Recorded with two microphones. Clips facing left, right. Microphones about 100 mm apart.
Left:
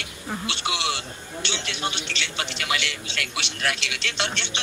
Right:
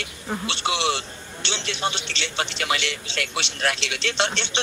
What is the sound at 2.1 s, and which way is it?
A man's voice, 30° right (ahead or behind).